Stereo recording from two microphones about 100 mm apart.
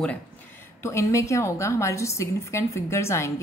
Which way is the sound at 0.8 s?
30° left (ahead or behind).